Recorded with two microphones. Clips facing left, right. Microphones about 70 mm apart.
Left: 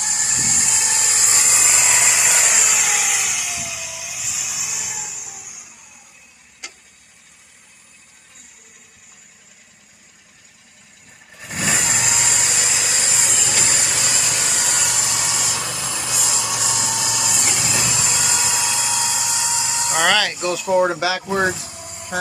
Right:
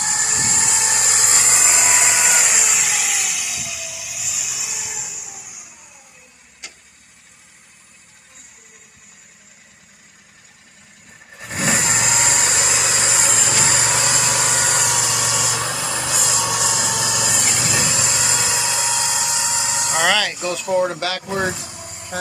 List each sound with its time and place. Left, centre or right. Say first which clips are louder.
0.0 s a sound: right 4 dB; right
0.3 s a sound: right 3 dB; right; by 2.5 s centre
2.5 s vehicle: left 1 dB; centre
11.4 s vehicle: right 2 dB; right
11.9 s vehicle: right 3 dB; right
15.7 s a sound: right 3 dB; right
17.7 s vehicle: right 2 dB; right
18.9 s vehicle: right 1 dB; right
19.9 s speech: left 1 dB; centre